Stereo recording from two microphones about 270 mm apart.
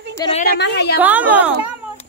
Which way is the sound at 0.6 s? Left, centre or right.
Left.